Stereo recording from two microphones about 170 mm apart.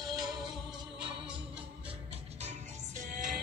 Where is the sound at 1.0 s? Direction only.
5° right (ahead or behind).